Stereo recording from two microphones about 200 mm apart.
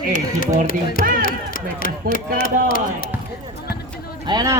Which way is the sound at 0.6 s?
45° left (ahead or behind).